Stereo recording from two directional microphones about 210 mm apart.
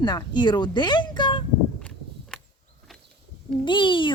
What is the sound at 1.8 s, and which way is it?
Walk, 5° left (ahead or behind).